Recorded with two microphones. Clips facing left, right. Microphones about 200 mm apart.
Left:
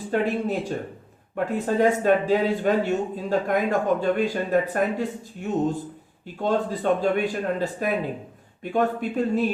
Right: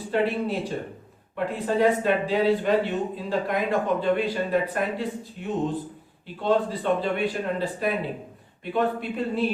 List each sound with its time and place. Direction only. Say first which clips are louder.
0.1 s speech: left 1 dB; 45° left (ahead or behind)